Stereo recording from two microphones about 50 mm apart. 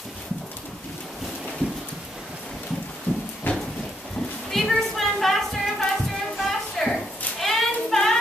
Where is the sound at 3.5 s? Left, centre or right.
Left.